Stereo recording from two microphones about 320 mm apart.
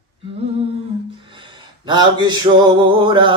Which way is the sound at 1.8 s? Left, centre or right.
Centre.